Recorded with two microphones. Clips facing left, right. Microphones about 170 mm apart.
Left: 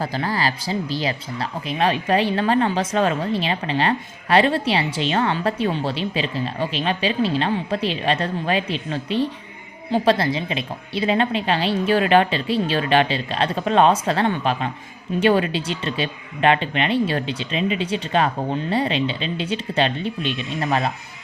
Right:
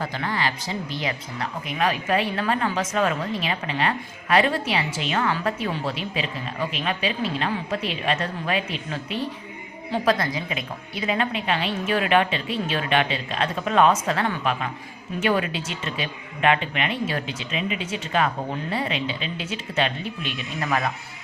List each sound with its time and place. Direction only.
0.0 s speech: 35° left (ahead or behind)